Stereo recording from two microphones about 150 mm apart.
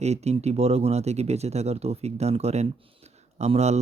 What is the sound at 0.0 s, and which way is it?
Speech, 45° right (ahead or behind).